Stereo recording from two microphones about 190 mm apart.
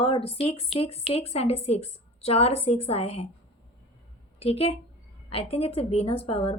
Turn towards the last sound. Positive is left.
turn(degrees=30)  # may be behind; listen again after turning